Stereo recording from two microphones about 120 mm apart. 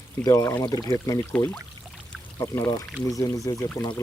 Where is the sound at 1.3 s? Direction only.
15° left (ahead or behind).